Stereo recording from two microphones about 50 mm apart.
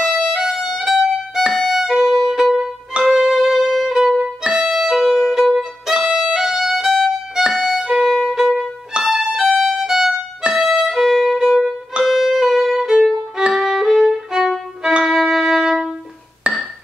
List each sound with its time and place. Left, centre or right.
0.0 s violin: centre
1.5 s music: centre
3.0 s violin: centre
4.4 s violin: right
4.6 s music: centre
7.6 s violin: centre
8.9 s violin: centre
9.2 s music: centre
10.9 s violin: centre
13.6 s violin: centre
14.3 s violin: centre
16.5 s music: right